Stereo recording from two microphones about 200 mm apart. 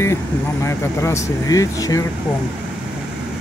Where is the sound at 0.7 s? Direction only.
15° left (ahead or behind).